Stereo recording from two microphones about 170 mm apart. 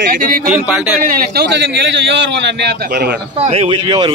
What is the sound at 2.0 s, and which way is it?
A man's voice, 90° right.